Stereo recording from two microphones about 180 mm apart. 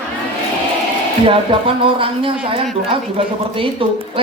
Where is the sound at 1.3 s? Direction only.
30° right (ahead or behind).